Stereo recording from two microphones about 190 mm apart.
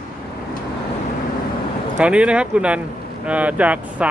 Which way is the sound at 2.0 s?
5° right (ahead or behind).